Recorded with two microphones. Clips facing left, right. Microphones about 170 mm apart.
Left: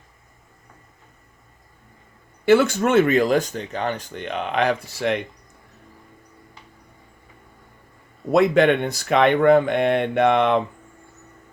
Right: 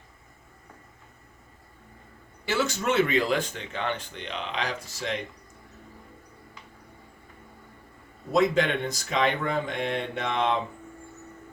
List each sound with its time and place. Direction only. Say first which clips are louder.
2.5 s speech: left 10 dB; 55° left (ahead or behind)
8.3 s speech: left 7 dB; 65° left (ahead or behind)